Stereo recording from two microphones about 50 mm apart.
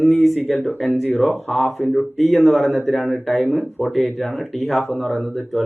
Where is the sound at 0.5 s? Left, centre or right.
Left.